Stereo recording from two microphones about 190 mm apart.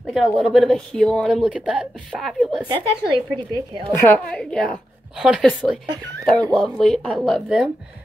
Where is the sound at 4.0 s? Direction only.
5° left (ahead or behind).